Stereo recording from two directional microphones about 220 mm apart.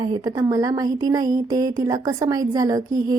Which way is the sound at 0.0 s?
20° right (ahead or behind).